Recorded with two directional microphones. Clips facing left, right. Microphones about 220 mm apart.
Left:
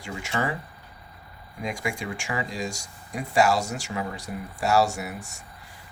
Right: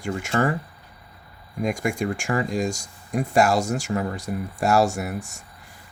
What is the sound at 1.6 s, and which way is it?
Speech, 50° right (ahead or behind).